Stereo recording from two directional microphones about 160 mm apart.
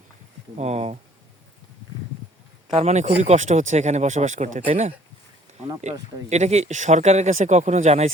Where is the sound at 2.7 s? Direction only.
45° right (ahead or behind).